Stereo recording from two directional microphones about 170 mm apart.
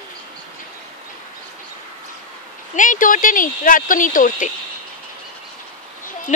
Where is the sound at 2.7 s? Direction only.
50° left (ahead or behind).